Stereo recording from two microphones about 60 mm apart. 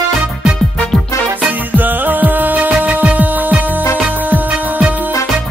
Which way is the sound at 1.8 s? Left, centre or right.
Right.